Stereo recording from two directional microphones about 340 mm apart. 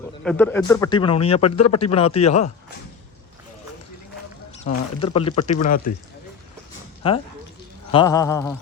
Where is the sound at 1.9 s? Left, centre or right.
Centre.